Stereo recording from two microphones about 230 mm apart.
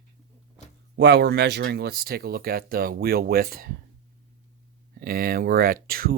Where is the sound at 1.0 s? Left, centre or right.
Right.